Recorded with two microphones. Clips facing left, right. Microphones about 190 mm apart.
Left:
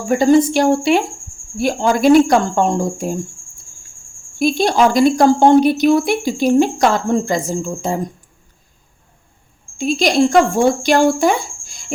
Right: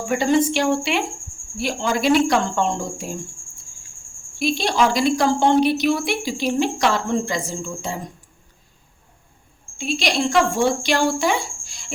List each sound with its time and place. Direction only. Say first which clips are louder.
0.0 s speech: left 6 dB; 40° left (ahead or behind)
4.4 s speech: left 6 dB; 50° left (ahead or behind)
9.7 s speech: left 8 dB; 45° left (ahead or behind)